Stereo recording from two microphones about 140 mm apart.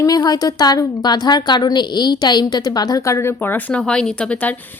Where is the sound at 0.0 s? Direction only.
30° left (ahead or behind).